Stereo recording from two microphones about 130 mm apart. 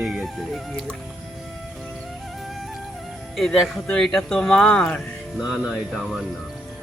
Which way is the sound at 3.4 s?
Centre (ahead or behind).